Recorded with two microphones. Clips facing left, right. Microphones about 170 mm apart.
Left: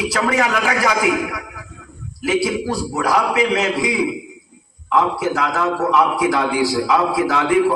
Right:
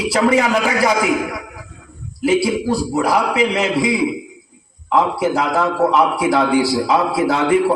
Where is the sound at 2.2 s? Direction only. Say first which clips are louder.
Right 3 dB; 30° right (ahead or behind).